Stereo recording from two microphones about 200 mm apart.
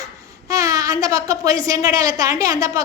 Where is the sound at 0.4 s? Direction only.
15° right (ahead or behind).